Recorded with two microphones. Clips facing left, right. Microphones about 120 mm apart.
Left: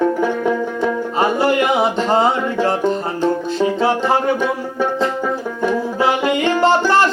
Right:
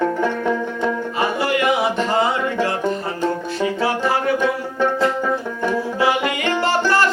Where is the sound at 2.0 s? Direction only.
30° left (ahead or behind).